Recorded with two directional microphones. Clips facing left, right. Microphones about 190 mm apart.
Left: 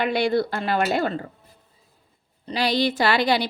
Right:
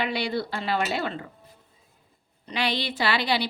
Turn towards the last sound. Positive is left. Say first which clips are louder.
# left 5 dB
turn(degrees=45)  # may be behind; listen again after turning